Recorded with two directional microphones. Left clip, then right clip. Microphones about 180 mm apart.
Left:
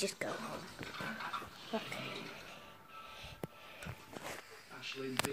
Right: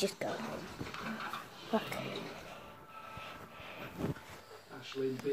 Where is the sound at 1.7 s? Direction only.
15° right (ahead or behind).